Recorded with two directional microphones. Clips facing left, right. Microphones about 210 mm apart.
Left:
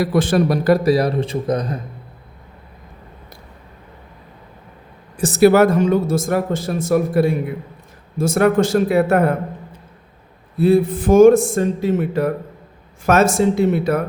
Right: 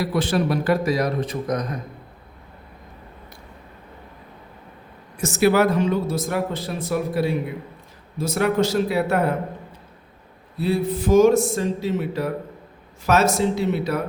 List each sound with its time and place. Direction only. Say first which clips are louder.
0.0 s a man's voice: left 5 dB; 50° left (ahead or behind); by 1.8 s 30° left (ahead or behind)
5.1 s speech: left 6 dB; 35° left (ahead or behind); by 9.3 s 50° left (ahead or behind)
10.6 s speech: left 7 dB; 50° left (ahead or behind)
13.3 s speech: left 5 dB; 50° left (ahead or behind)